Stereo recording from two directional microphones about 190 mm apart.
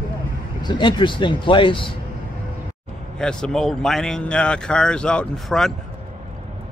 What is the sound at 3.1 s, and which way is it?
Speech, 5° left (ahead or behind).